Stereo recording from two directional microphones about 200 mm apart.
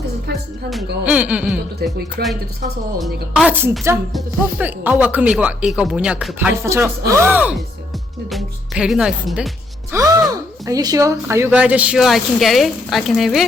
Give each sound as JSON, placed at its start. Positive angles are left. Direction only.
{"t": 1.0, "sound": "speech", "side_deg": -5}
{"t": 2.2, "sound": "speech", "side_deg": -50}
{"t": 3.0, "sound": "speech", "side_deg": -5}
{"t": 9.9, "sound": "a woman's voice", "side_deg": -15}